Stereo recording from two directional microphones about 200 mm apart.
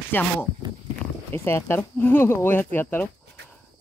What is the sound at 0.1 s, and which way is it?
Speech, 10° left (ahead or behind).